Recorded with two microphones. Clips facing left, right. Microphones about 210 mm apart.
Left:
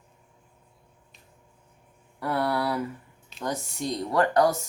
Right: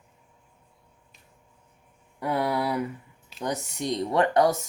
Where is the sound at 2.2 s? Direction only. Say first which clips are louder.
Even; 15° right (ahead or behind).